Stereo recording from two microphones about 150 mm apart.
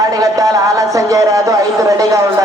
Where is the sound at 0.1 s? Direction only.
25° right (ahead or behind).